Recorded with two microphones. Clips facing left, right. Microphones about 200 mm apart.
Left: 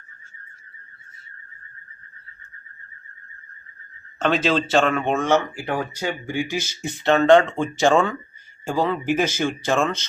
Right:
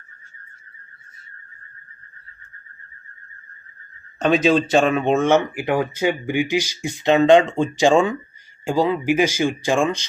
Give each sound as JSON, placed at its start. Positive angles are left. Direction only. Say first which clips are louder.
{"t": 4.2, "sound": "speech", "louder": "right 4 dB", "side_deg": -15}